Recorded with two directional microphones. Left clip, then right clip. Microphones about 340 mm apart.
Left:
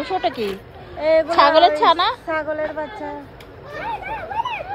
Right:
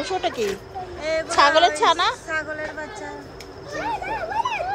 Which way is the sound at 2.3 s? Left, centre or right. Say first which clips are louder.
Left 4 dB; centre.